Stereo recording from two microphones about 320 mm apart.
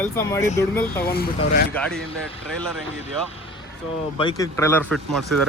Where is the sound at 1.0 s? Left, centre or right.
Left.